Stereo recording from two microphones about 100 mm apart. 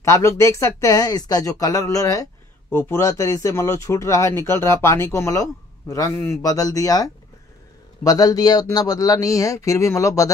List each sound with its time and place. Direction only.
0.0 s speech: 30° left (ahead or behind)
2.7 s speech: 25° left (ahead or behind)